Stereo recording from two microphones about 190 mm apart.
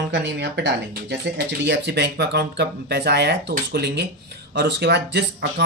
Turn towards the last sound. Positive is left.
turn(degrees=-65)  # may be behind; listen again after turning